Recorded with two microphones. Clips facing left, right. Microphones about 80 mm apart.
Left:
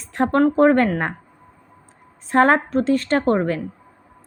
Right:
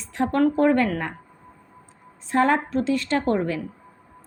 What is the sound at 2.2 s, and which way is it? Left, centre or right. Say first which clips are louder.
A woman's voice: left 4 dB; left.